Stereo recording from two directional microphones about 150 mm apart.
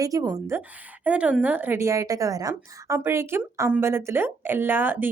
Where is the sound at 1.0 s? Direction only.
10° right (ahead or behind).